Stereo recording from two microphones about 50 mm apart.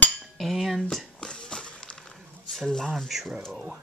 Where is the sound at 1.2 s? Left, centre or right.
Centre.